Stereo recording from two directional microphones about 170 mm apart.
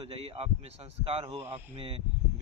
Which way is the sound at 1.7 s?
35° right (ahead or behind).